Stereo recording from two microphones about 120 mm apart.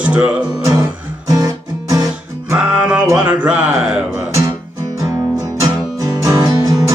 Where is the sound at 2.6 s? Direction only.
10° right (ahead or behind).